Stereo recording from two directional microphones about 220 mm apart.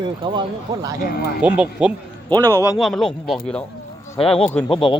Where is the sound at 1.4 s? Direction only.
5° right (ahead or behind).